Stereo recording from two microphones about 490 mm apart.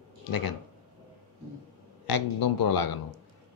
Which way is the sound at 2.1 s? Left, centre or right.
Left.